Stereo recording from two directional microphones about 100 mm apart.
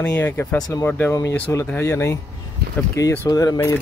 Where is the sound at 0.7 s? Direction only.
25° left (ahead or behind).